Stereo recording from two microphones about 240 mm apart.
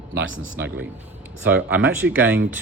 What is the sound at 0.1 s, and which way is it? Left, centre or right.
Speech, right.